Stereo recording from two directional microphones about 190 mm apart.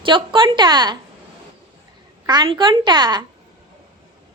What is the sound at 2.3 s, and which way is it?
Speech, 20° right (ahead or behind).